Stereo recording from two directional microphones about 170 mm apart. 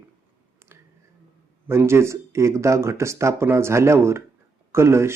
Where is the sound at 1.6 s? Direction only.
15° right (ahead or behind).